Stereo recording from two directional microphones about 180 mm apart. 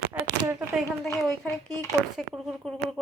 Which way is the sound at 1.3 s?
5° left (ahead or behind).